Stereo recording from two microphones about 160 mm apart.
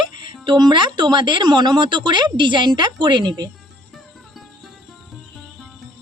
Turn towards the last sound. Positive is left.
turn(degrees=0)  # may be behind; listen again after turning